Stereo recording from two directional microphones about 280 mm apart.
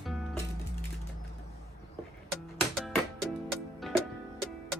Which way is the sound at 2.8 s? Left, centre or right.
Centre.